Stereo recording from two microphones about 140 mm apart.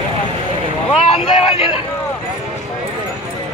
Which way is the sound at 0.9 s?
40° left (ahead or behind).